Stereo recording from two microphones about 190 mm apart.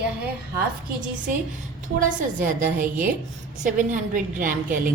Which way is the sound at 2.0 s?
45° right (ahead or behind).